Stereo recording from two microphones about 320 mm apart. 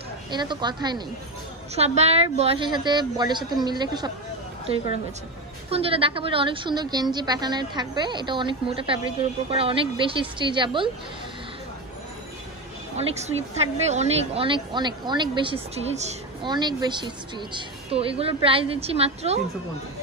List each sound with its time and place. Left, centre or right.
0.3 s speech: centre
5.7 s speech: centre
12.9 s a woman's voice: centre